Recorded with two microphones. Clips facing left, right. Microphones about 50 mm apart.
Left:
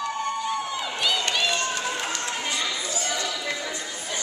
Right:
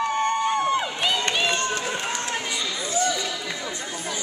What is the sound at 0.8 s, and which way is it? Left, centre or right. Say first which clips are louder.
Run: right 1 dB; right.